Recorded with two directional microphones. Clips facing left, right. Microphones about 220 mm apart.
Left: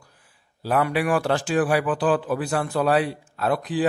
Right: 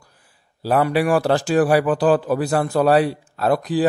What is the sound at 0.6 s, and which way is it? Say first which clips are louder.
A man's voice: right 4 dB; 35° right (ahead or behind).